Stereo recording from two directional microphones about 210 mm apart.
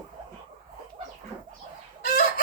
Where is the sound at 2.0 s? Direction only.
45° left (ahead or behind).